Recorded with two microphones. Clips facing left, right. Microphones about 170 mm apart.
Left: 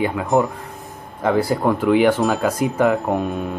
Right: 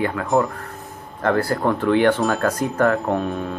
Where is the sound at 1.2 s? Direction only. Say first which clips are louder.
Left 2 dB; 10° left (ahead or behind).